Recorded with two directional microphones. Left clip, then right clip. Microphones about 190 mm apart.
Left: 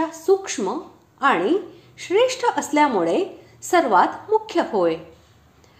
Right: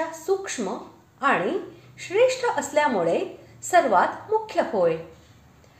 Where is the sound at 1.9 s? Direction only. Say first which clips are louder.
Left 2 dB; 30° left (ahead or behind).